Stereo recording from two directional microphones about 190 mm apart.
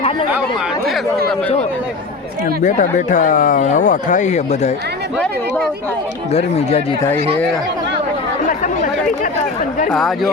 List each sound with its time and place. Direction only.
2.6 s speech: 40° left (ahead or behind)
6.3 s speech: 35° left (ahead or behind)
8.4 s speech: 45° left (ahead or behind)